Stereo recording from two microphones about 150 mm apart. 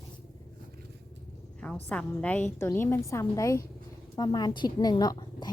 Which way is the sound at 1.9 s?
10° left (ahead or behind).